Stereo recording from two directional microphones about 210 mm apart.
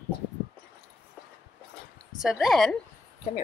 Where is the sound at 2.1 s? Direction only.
Centre (ahead or behind).